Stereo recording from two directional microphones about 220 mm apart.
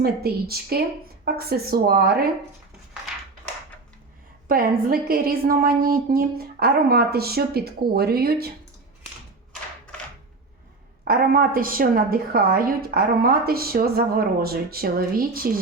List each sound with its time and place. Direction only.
0.0 s a woman's voice: 45° right (ahead or behind)
4.4 s a woman's voice: 40° right (ahead or behind)
11.0 s a woman's voice: 40° right (ahead or behind)